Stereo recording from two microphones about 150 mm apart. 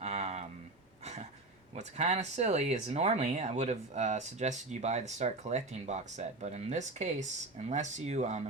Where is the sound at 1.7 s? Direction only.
50° right (ahead or behind).